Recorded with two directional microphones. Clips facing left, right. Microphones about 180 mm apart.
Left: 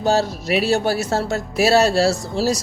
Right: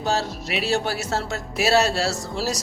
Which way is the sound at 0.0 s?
35° left (ahead or behind).